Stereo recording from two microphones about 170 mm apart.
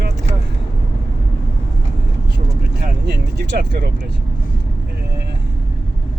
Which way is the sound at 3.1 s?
80° right.